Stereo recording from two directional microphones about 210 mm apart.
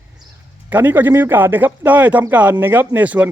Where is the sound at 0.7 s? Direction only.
10° right (ahead or behind).